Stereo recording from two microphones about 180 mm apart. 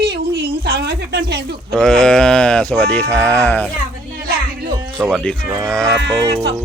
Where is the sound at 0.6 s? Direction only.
65° right (ahead or behind).